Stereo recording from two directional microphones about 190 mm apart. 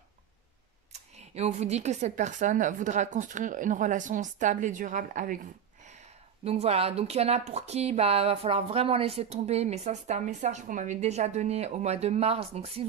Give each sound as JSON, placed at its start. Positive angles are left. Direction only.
{"t": 1.1, "sound": "a woman's voice", "side_deg": -35}